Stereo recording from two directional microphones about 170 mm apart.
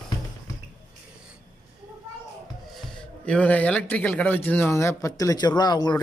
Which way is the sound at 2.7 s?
5° left (ahead or behind).